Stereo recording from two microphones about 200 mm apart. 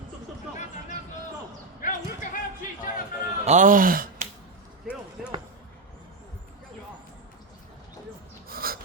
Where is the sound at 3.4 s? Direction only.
40° right (ahead or behind).